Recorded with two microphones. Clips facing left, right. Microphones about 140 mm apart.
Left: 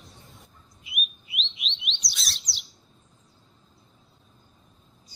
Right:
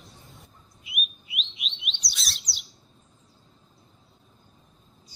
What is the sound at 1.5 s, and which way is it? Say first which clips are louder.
Chirp: left 1 dB; centre (ahead or behind).